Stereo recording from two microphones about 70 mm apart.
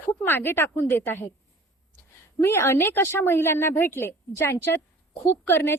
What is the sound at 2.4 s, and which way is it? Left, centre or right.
A woman's voice, left.